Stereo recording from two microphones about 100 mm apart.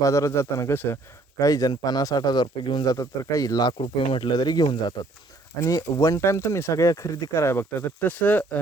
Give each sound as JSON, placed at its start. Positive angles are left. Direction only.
{"t": 0.0, "sound": "speech", "side_deg": 30}
{"t": 1.4, "sound": "speech", "side_deg": 35}
{"t": 3.8, "sound": "speech", "side_deg": 55}
{"t": 5.5, "sound": "speech", "side_deg": 35}